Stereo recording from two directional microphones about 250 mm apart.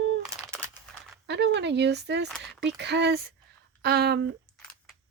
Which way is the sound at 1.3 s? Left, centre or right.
Right.